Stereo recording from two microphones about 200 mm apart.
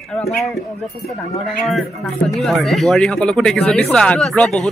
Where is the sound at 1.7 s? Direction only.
Centre (ahead or behind).